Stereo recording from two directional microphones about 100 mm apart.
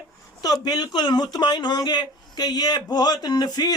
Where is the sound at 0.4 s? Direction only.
40° left (ahead or behind).